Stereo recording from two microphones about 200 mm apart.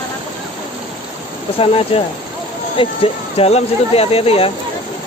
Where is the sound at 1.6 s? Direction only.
30° left (ahead or behind).